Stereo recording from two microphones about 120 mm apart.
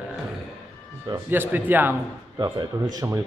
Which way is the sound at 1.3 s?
15° right (ahead or behind).